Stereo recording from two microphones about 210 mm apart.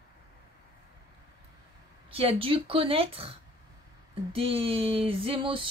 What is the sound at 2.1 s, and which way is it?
Female singing, 25° right (ahead or behind).